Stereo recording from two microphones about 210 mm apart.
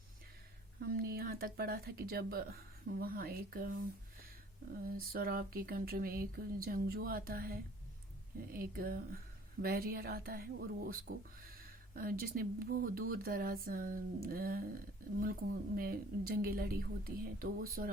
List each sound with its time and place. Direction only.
0.8 s speech: 45° right (ahead or behind)
4.8 s speech: 45° right (ahead or behind)